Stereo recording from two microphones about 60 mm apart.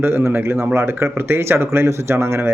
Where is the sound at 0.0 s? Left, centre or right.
Right.